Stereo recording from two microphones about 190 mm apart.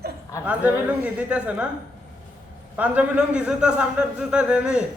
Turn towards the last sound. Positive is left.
turn(degrees=-5)  # may be behind; listen again after turning